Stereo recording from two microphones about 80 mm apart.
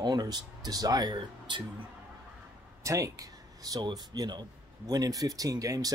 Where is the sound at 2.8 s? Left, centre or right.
Right.